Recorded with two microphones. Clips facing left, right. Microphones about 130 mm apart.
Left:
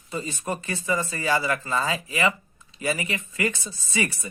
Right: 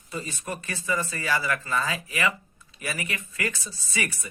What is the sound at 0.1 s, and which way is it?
Speech, 25° left (ahead or behind).